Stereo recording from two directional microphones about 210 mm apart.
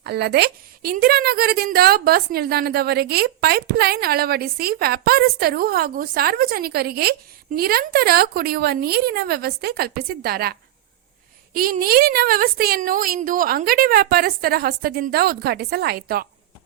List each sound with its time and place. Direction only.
0.0 s a woman's voice: 50° right (ahead or behind)